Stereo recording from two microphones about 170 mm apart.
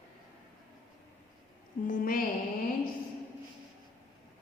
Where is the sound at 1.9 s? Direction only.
55° left (ahead or behind).